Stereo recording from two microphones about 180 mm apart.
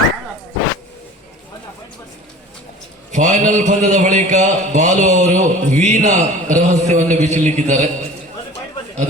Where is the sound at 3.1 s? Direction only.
45° right (ahead or behind).